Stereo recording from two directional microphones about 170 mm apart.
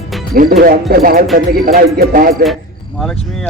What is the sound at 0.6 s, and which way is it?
Speech, 60° right (ahead or behind).